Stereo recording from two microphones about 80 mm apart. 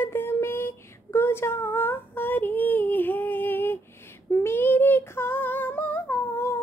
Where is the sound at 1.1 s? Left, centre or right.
Left.